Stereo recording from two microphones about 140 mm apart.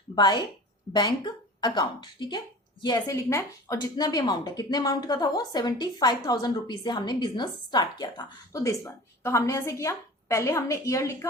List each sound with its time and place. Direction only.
0.2 s a woman's voice: 30° left (ahead or behind)